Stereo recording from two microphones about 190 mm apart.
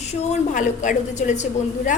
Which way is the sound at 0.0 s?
40° left (ahead or behind).